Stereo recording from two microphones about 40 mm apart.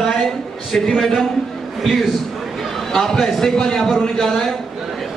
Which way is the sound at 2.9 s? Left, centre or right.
Centre.